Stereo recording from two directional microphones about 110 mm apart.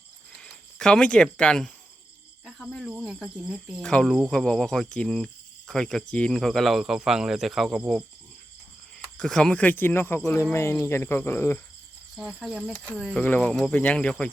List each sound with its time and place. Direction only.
0.3 s speech: 5° left (ahead or behind)
9.0 s speech: 5° left (ahead or behind); by 11.6 s 20° left (ahead or behind)
12.1 s speech: 5° right (ahead or behind)
12.8 s speech: 5° left (ahead or behind)